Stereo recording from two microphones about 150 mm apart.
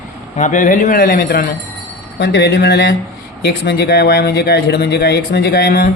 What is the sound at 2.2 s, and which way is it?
Speech, 90° left.